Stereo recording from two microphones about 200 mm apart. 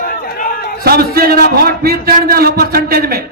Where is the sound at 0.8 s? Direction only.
50° right (ahead or behind).